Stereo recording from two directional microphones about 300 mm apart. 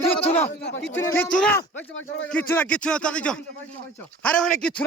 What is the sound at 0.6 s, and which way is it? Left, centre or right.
Speech, left.